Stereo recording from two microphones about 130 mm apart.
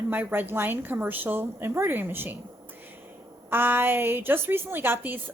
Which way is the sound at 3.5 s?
15° right (ahead or behind).